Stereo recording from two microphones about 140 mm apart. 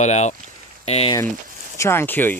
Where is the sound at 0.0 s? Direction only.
55° left (ahead or behind).